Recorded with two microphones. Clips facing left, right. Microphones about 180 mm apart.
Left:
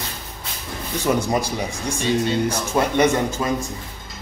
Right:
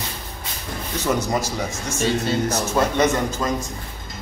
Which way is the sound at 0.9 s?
10° left (ahead or behind).